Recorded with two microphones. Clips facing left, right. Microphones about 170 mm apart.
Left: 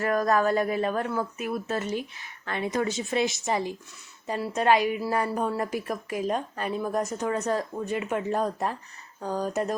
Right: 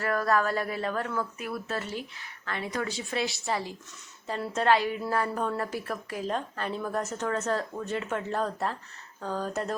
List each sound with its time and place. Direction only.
0.0 s a woman's voice: 20° left (ahead or behind)